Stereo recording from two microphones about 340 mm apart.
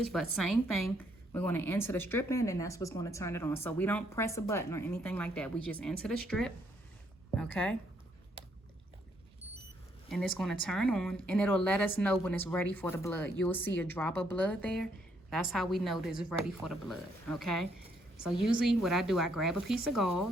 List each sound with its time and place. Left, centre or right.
0.0 s a woman's voice: centre
10.1 s speech: centre